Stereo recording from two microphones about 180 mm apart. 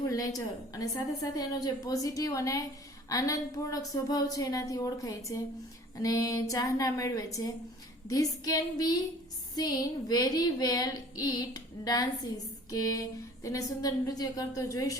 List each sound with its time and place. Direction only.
0.1 s a woman's voice: 20° left (ahead or behind)